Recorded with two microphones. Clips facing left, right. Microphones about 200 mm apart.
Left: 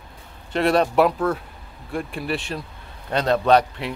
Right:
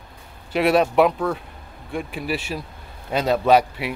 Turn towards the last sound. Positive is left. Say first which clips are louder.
# right 1 dB
turn(degrees=-5)  # may be behind; listen again after turning